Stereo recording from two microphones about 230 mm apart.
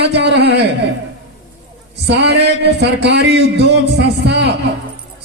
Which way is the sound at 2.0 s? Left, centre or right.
Right.